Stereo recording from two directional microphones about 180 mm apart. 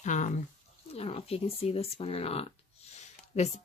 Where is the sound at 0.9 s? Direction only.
35° left (ahead or behind).